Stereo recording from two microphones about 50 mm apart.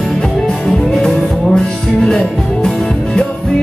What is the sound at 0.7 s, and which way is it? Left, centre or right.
Music, centre.